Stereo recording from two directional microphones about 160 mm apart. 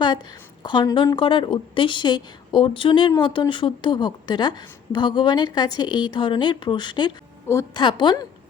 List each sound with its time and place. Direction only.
0.6 s a woman's voice: 30° left (ahead or behind)